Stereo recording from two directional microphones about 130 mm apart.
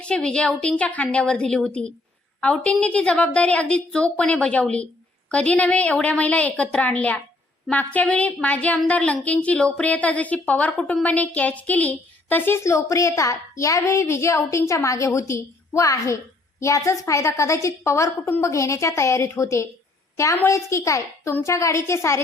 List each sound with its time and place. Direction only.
0.0 s a woman's voice: 5° left (ahead or behind); by 22.2 s 20° left (ahead or behind)